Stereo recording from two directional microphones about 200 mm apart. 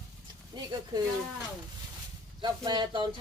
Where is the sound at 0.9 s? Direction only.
20° right (ahead or behind).